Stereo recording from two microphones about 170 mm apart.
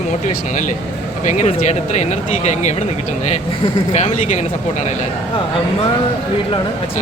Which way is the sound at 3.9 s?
40° left (ahead or behind).